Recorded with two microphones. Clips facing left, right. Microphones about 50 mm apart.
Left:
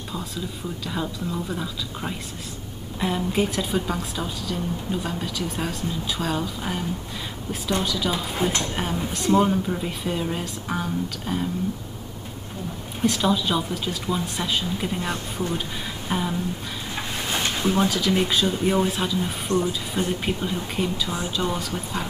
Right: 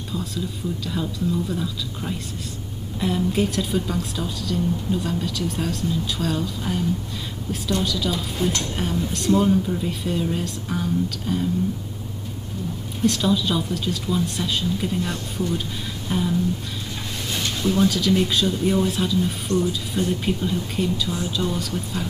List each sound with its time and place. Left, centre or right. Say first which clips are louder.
1.5 s a woman's voice: right 2 dB; centre
8.1 s a woman's voice: even; left
13.0 s a woman's voice: right 1 dB; centre
17.3 s a sound: even; left
17.8 s a woman's voice: right 2 dB; centre
18.5 s a woman's voice: right 1 dB; centre